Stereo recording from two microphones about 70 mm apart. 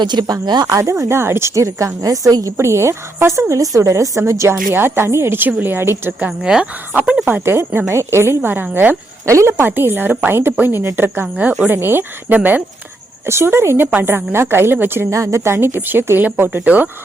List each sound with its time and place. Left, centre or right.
0.0 s speech: right
0.7 s a woman's voice: right
4.7 s a woman's voice: right
6.4 s speech: centre
7.3 s a woman's voice: right
9.2 s a woman's voice: right
9.6 s a woman's voice: right
13.2 s a woman's voice: right
15.1 s a woman's voice: right